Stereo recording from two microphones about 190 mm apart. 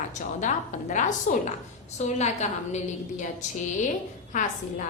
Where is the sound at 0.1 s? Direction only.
40° left (ahead or behind).